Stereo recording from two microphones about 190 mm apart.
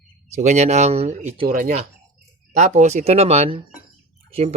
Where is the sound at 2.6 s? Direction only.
40° right (ahead or behind).